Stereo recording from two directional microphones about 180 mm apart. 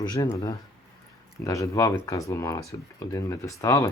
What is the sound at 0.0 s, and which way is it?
Speech, 20° left (ahead or behind).